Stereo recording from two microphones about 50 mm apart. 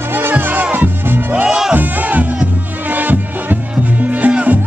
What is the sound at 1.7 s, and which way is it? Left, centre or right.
Music, right.